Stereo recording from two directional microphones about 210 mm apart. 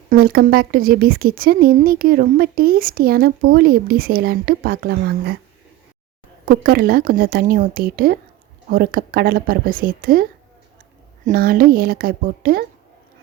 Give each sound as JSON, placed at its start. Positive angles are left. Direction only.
{"t": 0.1, "sound": "speech", "side_deg": -45}
{"t": 6.4, "sound": "speech", "side_deg": -40}
{"t": 11.3, "sound": "speech", "side_deg": -45}